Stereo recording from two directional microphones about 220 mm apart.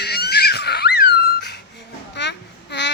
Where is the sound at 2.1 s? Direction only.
50° left (ahead or behind).